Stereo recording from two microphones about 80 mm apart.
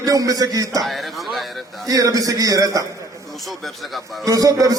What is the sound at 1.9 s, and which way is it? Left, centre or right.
A man's voice, right.